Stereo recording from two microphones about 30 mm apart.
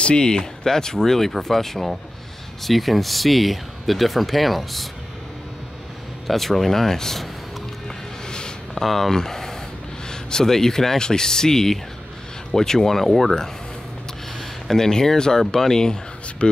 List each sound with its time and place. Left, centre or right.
0.0 s speech: left; by 4.8 s centre
6.2 s speech: centre
8.3 s a sound: left
8.8 s speech: centre